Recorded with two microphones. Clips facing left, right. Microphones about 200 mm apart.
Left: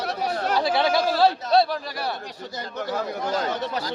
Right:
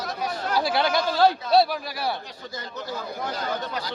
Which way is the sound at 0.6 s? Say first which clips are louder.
Left 2 dB; centre (ahead or behind).